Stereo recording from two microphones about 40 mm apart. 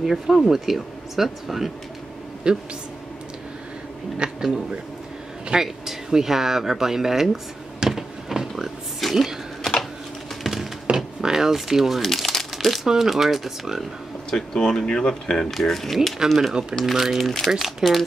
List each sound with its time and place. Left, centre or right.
0.0 s speech: centre
2.4 s speech: right
4.2 s speech: right
5.5 s speech: centre
7.8 s a sound: centre
9.1 s speech: centre
10.4 s a sound: centre
11.0 s drawer open or close: centre
12.0 s crumpling: centre
12.8 s speech: centre
14.3 s speech: centre
17.2 s speech: centre
17.6 s speech: centre